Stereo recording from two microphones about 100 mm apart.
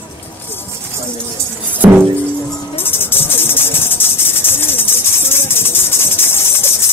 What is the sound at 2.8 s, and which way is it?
Music, 20° left (ahead or behind).